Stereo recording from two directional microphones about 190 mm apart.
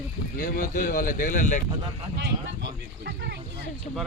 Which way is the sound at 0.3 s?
45° left (ahead or behind).